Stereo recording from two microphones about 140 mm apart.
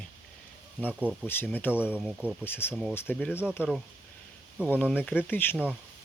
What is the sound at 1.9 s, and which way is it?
Speech, 10° right (ahead or behind).